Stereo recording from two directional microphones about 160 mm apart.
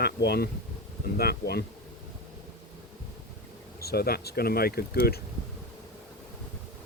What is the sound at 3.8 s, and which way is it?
Speech, 75° left (ahead or behind).